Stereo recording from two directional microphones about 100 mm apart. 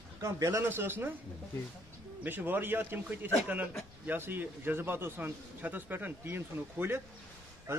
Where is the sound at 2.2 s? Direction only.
20° right (ahead or behind).